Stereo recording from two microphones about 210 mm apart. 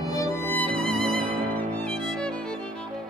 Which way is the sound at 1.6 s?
5° left (ahead or behind).